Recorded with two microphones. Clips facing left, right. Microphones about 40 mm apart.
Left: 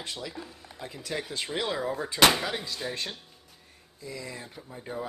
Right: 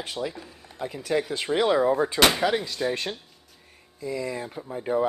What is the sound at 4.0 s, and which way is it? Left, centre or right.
Speech, right.